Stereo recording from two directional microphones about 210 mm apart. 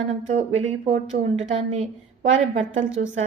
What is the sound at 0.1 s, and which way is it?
Speech, 35° right (ahead or behind).